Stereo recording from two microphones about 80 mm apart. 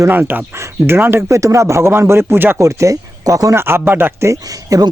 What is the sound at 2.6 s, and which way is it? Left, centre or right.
Speech, right.